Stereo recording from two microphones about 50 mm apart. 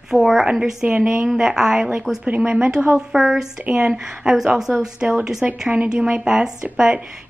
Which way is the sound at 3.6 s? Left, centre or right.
Right.